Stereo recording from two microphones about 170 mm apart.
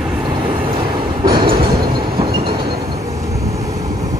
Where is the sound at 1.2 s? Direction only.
25° right (ahead or behind).